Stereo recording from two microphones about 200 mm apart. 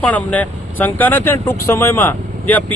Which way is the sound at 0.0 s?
5° left (ahead or behind).